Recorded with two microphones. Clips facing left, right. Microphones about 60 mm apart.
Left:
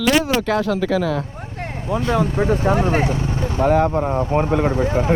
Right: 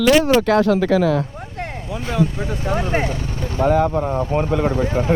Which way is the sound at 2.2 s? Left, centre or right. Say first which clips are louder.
Left 3 dB; left.